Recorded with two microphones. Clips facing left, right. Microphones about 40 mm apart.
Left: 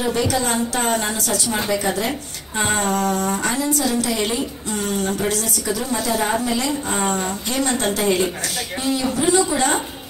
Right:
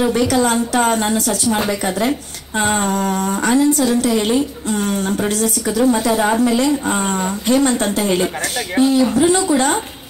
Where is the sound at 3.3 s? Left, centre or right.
Right.